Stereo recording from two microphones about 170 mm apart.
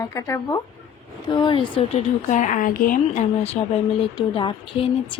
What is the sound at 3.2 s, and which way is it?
Speech, 40° left (ahead or behind).